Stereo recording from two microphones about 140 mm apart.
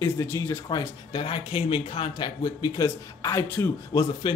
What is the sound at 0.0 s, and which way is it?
Speech, 15° left (ahead or behind).